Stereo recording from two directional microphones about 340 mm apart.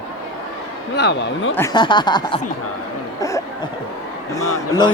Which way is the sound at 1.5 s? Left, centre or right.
Centre.